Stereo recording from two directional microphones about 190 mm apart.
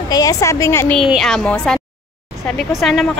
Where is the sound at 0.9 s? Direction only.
Centre (ahead or behind).